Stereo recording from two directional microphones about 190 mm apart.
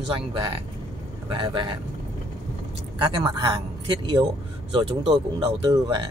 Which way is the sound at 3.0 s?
25° right (ahead or behind).